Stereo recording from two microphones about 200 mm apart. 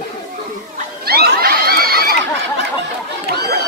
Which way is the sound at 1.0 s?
50° right (ahead or behind).